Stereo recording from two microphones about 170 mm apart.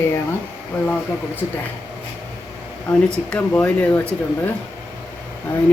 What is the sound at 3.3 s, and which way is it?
Speech, 5° left (ahead or behind).